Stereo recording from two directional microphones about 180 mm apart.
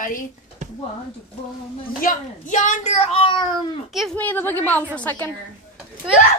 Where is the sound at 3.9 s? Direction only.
5° left (ahead or behind).